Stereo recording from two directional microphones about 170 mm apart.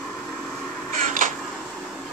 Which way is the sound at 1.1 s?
50° right (ahead or behind).